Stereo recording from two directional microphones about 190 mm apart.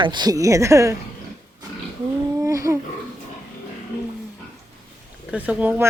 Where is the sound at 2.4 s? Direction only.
15° right (ahead or behind).